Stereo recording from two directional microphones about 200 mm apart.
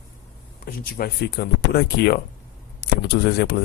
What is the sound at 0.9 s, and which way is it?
Speech, 50° left (ahead or behind).